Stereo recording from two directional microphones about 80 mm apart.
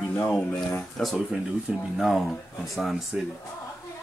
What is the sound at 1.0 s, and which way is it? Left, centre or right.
Speech, centre.